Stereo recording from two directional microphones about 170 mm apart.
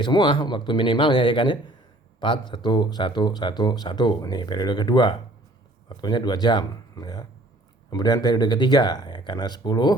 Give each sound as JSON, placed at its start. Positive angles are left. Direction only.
{"t": 0.0, "sound": "speech", "side_deg": 30}